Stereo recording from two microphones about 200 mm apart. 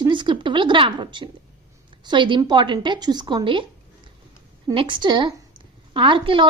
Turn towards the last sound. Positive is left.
turn(degrees=-25)  # may be behind; listen again after turning